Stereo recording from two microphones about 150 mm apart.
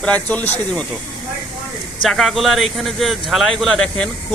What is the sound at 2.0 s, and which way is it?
A man's voice, centre (ahead or behind).